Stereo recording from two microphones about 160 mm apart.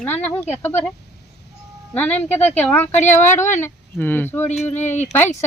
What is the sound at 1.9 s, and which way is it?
Speech, 10° left (ahead or behind).